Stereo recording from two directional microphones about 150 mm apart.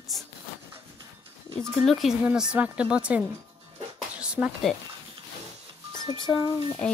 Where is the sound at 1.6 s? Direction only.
Centre (ahead or behind).